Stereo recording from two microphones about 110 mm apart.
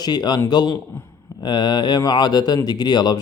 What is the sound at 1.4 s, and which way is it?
Speech, 40° left (ahead or behind).